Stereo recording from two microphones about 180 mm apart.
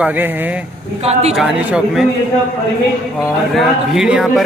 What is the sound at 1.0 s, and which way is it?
Speech, 35° right (ahead or behind).